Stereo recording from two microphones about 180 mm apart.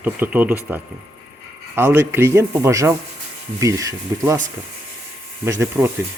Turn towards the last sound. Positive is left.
turn(degrees=-15)  # may be behind; listen again after turning